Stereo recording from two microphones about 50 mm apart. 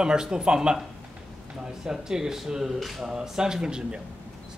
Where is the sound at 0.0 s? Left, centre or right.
Centre.